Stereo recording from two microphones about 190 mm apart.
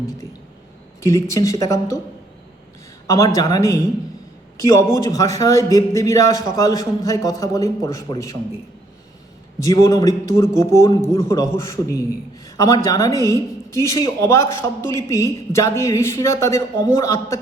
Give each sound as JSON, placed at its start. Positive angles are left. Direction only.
{"t": 1.0, "sound": "speech", "side_deg": 15}
{"t": 3.1, "sound": "a man's voice", "side_deg": 15}
{"t": 9.6, "sound": "speech", "side_deg": 15}